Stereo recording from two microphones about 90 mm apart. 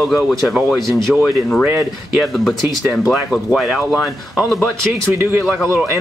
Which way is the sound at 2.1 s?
Centre (ahead or behind).